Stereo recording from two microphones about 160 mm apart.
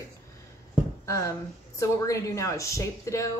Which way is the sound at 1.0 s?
20° left (ahead or behind).